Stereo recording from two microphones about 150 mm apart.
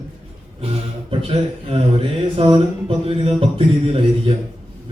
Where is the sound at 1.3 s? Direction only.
40° right (ahead or behind).